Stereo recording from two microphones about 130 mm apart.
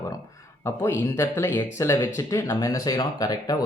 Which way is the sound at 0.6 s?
20° left (ahead or behind).